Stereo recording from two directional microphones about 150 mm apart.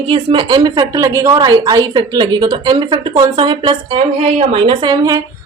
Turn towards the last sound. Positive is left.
turn(degrees=-25)  # may be behind; listen again after turning